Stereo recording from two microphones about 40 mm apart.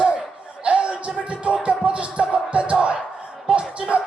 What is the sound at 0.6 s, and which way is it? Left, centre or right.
Music, right.